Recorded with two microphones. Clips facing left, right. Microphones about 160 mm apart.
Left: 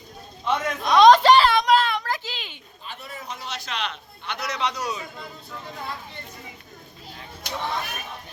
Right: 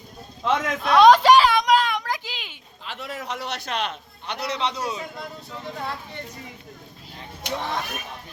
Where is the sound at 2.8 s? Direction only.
90° right; by 4.4 s 50° right (ahead or behind).